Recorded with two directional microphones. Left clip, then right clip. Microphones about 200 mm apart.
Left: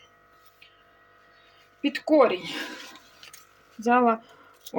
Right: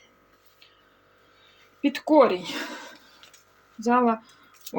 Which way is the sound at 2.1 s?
15° right (ahead or behind).